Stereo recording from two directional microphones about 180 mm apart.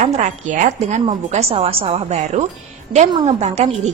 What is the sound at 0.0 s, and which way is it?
A woman's voice, 40° right (ahead or behind).